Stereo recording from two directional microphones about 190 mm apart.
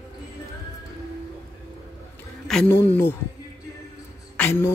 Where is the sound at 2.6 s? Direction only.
10° left (ahead or behind).